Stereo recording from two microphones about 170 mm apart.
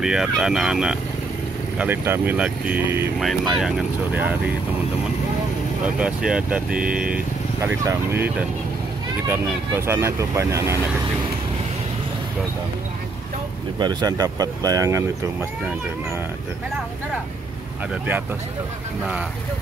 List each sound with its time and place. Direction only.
0.0 s speech: 5° right (ahead or behind)
3.2 s speech: centre (ahead or behind)
5.9 s speech: 5° right (ahead or behind)
13.7 s speech: 25° right (ahead or behind)